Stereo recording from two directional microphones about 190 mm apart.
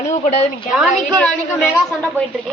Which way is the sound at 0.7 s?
Centre (ahead or behind).